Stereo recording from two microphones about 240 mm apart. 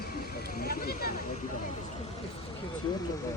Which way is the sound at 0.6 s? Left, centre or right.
Left.